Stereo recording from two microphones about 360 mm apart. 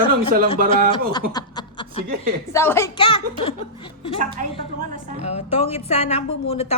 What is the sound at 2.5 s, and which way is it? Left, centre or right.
Speech, centre.